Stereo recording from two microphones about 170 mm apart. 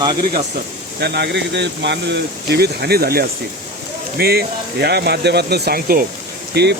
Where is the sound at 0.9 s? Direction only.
80° right; by 6.1 s 60° right (ahead or behind).